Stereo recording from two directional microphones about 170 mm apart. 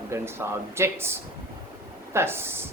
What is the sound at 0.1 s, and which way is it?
Speech, 15° right (ahead or behind).